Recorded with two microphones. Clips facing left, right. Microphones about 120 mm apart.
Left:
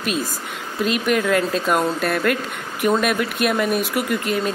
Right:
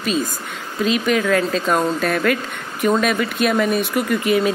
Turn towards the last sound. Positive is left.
turn(degrees=5)  # may be behind; listen again after turning